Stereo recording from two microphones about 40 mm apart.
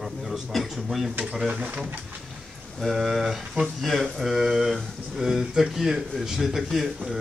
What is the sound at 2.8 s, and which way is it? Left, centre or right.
Speech, centre.